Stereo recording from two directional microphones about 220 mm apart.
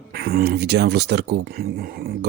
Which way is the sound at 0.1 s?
45° right (ahead or behind).